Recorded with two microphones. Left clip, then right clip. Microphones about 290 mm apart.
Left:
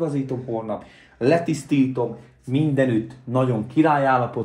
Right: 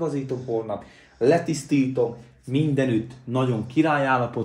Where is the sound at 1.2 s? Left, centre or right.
Centre.